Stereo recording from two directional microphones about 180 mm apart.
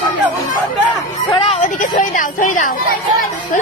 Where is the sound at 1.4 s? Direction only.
40° left (ahead or behind).